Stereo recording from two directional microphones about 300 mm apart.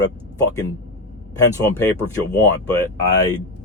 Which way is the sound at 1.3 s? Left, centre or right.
Centre.